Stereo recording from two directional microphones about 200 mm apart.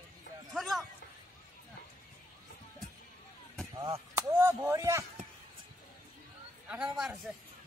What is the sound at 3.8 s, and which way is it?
Chop, 20° right (ahead or behind).